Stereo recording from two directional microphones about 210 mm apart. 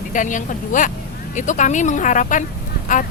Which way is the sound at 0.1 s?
35° left (ahead or behind).